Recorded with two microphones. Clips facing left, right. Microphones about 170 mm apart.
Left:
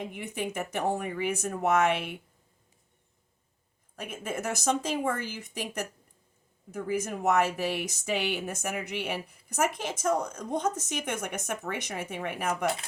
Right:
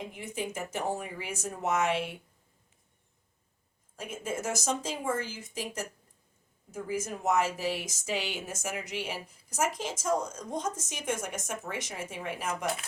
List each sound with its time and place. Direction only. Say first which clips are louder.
0.1 s speech: left 2 dB; 60° left (ahead or behind)
3.9 s speech: left 1 dB; 60° left (ahead or behind)